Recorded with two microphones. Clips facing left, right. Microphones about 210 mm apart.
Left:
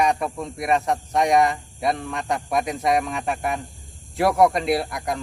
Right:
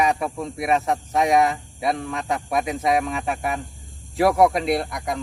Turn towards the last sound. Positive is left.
turn(degrees=0)  # may be behind; listen again after turning